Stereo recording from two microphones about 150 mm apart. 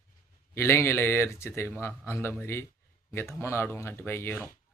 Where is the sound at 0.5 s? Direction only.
15° left (ahead or behind).